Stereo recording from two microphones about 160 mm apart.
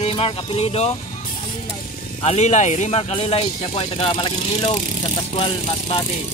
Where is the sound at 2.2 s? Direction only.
45° left (ahead or behind).